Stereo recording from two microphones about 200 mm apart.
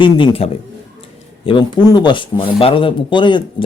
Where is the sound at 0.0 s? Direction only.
25° left (ahead or behind).